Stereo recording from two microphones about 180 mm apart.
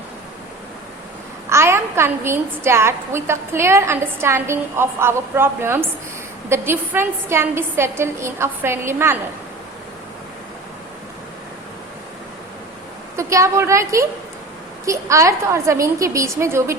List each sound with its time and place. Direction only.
1.5 s a woman's voice: 15° right (ahead or behind)
13.1 s a woman's voice: 15° right (ahead or behind)